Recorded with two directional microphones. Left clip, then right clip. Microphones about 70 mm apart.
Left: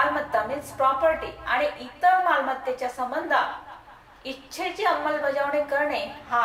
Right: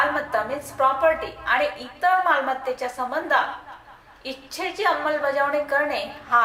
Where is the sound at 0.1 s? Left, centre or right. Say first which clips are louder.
Right 1 dB; right.